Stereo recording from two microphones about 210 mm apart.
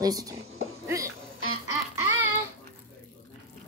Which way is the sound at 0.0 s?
15° right (ahead or behind).